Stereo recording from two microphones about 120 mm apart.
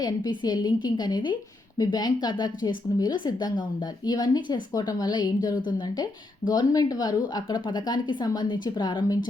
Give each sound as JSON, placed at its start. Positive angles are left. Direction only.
{"t": 0.0, "sound": "a woman's voice", "side_deg": 35}